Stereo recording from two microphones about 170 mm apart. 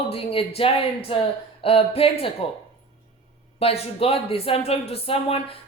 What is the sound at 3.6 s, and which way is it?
Speech, 35° left (ahead or behind).